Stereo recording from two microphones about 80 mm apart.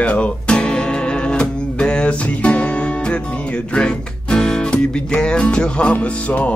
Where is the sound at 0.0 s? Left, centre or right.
Centre.